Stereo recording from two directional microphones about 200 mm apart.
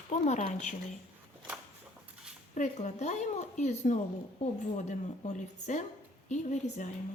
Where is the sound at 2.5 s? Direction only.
35° left (ahead or behind).